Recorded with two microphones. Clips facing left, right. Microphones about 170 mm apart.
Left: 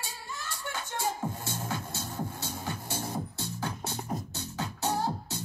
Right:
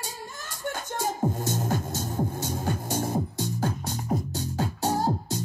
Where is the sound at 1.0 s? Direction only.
45° right (ahead or behind).